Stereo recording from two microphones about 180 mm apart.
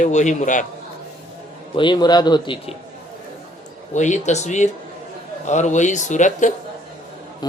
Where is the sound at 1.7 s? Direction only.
25° left (ahead or behind).